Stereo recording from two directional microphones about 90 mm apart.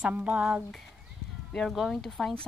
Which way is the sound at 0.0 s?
15° right (ahead or behind).